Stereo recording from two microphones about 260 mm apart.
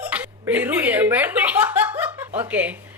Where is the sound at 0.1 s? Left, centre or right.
Centre.